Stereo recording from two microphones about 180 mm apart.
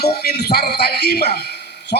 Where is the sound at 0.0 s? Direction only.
60° left (ahead or behind).